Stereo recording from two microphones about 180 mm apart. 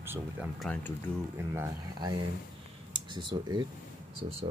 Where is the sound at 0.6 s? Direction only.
5° left (ahead or behind).